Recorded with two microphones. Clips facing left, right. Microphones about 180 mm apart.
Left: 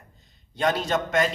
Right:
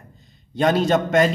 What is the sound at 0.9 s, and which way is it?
Speech, 55° right (ahead or behind).